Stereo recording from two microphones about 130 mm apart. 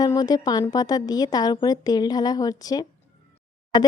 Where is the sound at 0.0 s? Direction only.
30° left (ahead or behind).